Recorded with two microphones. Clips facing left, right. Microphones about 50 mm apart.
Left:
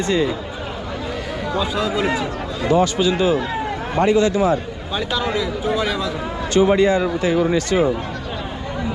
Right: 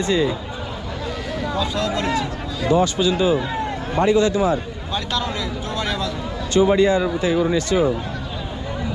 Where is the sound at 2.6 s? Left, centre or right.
Left.